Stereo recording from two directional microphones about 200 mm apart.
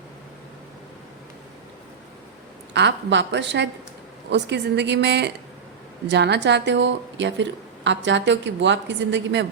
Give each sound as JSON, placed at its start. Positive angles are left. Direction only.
{"t": 2.7, "sound": "a woman's voice", "side_deg": -60}